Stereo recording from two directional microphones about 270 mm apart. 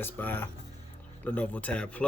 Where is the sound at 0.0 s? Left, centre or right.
Centre.